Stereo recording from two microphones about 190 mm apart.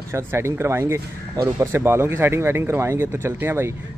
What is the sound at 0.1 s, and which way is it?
Speech, 10° right (ahead or behind).